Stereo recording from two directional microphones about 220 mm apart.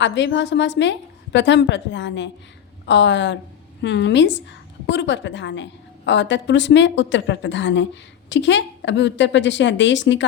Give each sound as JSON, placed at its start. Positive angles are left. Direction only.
{"t": 0.0, "sound": "a woman's voice", "side_deg": 55}